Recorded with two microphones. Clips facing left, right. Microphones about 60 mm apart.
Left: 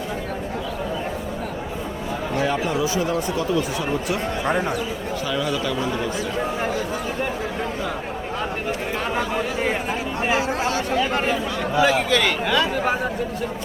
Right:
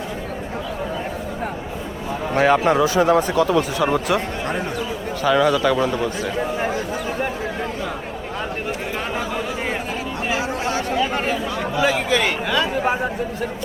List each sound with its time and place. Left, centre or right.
2.3 s speech: right
5.2 s speech: right
10.2 s speech: centre